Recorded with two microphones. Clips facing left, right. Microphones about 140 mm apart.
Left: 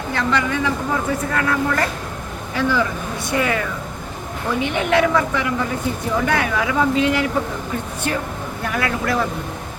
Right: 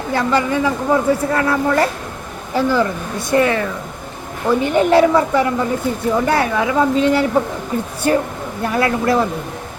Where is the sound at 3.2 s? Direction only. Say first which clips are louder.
Right 6 dB; 35° right (ahead or behind).